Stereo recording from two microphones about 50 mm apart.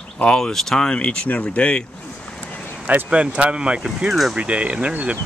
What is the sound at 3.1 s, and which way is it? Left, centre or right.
Speech, right.